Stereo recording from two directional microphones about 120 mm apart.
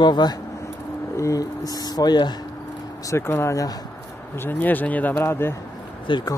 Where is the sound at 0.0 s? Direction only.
35° left (ahead or behind).